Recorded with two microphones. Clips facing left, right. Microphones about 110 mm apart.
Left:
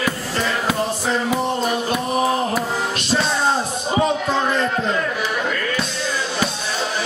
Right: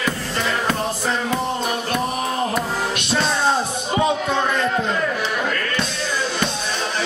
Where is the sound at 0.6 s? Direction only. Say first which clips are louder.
Left 1 dB; 5° left (ahead or behind).